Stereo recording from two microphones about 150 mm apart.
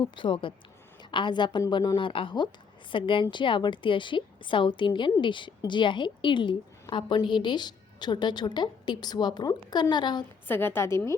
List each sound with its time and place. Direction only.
0.0 s a woman's voice: 35° left (ahead or behind)
10.5 s a woman's voice: 15° left (ahead or behind)